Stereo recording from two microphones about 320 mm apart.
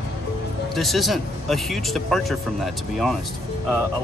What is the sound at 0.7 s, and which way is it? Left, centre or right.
Speech, centre.